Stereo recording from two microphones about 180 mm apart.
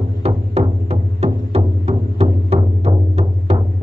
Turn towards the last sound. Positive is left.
turn(degrees=-35)  # may be behind; listen again after turning